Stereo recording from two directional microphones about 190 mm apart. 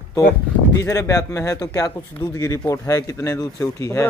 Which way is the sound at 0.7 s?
15° left (ahead or behind).